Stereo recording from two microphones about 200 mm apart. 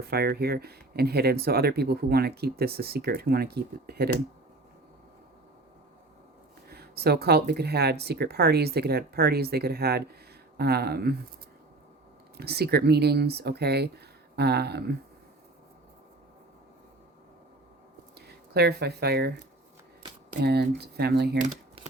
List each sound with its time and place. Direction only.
0.0 s speech: 50° right (ahead or behind)
6.7 s speech: 50° right (ahead or behind)
12.4 s speech: 50° right (ahead or behind)
18.3 s speech: 55° right (ahead or behind)
20.4 s speech: 55° right (ahead or behind)
21.3 s a sound: 40° right (ahead or behind)